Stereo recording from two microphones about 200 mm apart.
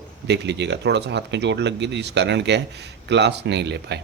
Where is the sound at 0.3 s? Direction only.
60° right (ahead or behind).